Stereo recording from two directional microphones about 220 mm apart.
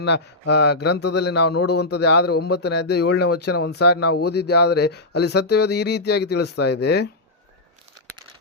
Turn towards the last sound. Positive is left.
turn(degrees=50)  # may be behind; listen again after turning